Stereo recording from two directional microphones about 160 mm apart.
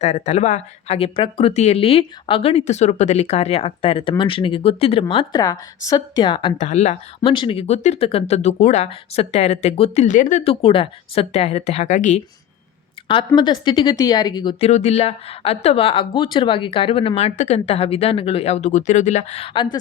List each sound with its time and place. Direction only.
0.0 s speech: 45° left (ahead or behind)
6.6 s speech: 45° left (ahead or behind)
7.3 s speech: 35° left (ahead or behind); by 10.4 s 50° left (ahead or behind)
10.4 s speech: 35° left (ahead or behind)
13.1 s a woman's voice: 30° left (ahead or behind)
14.6 s speech: 45° left (ahead or behind)